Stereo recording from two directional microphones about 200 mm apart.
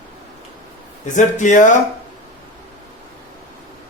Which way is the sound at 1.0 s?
40° left (ahead or behind).